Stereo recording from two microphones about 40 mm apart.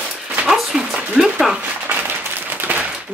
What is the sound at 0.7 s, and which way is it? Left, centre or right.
Speech, centre.